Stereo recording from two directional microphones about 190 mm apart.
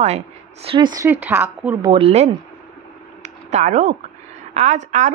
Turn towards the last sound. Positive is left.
turn(degrees=-40)  # may be behind; listen again after turning